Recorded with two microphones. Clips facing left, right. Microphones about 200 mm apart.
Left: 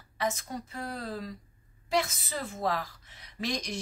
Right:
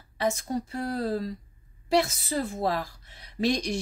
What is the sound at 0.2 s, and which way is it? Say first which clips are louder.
A woman's voice: right 5 dB; 30° right (ahead or behind).